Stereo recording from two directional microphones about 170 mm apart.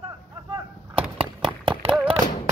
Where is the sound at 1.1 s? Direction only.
30° right (ahead or behind).